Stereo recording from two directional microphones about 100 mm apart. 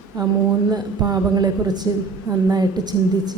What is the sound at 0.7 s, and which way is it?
A woman's voice, 45° right (ahead or behind).